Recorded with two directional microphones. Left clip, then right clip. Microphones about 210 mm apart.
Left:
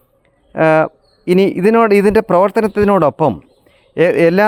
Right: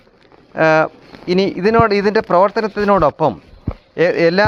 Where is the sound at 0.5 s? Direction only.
60° left (ahead or behind).